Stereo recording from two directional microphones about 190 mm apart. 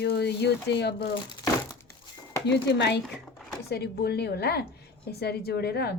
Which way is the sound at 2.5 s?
65° left (ahead or behind).